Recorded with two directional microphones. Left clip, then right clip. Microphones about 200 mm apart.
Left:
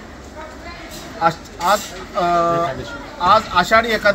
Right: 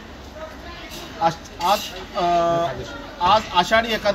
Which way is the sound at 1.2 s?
15° left (ahead or behind).